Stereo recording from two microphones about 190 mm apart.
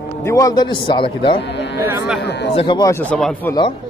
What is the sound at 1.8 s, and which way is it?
Speech, 10° right (ahead or behind).